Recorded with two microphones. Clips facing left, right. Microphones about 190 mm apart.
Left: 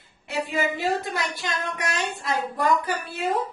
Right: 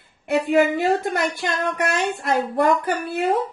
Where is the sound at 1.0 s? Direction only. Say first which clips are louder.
Right 6 dB; 55° right (ahead or behind).